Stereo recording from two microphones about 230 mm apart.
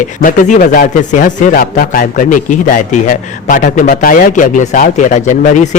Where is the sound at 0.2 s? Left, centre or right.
Left.